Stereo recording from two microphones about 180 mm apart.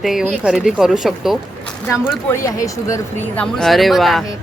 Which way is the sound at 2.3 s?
15° left (ahead or behind).